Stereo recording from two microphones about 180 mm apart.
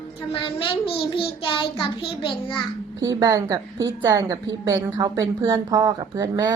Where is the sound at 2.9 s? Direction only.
20° right (ahead or behind).